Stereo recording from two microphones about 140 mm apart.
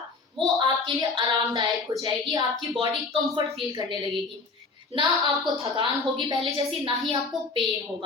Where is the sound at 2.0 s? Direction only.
30° right (ahead or behind).